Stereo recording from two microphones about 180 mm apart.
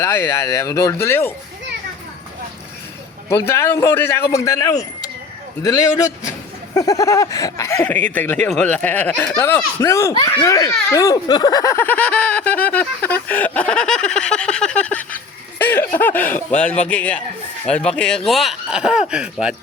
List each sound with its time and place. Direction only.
0.0 s speech: 15° left (ahead or behind)
3.2 s a man's voice: 15° left (ahead or behind)
15.5 s a sound: 10° left (ahead or behind)
16.0 s speech: 10° left (ahead or behind)